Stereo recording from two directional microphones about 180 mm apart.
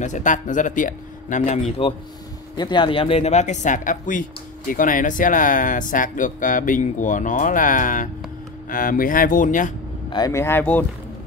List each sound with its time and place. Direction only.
0.0 s speech: 45° left (ahead or behind)
2.5 s speech: 25° left (ahead or behind); by 9.7 s 45° left (ahead or behind)
10.0 s speech: 25° left (ahead or behind)